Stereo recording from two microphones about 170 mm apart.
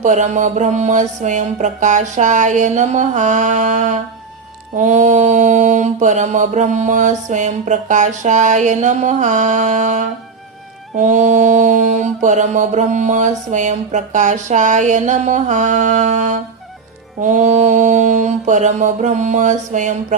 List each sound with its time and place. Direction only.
0.0 s mantra: 45° right (ahead or behind)